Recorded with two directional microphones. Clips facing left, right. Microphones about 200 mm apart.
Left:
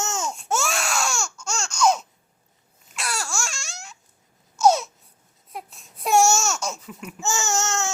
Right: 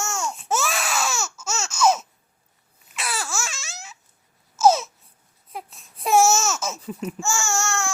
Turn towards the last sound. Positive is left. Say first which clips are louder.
# left 1 dB
turn(degrees=20)  # may be behind; listen again after turning